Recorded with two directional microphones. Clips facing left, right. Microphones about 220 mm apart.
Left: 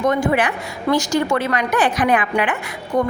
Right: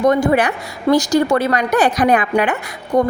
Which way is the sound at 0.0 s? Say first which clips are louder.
Right 4 dB; 40° right (ahead or behind).